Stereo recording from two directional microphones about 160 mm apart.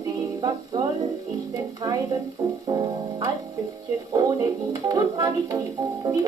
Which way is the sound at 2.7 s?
20° right (ahead or behind).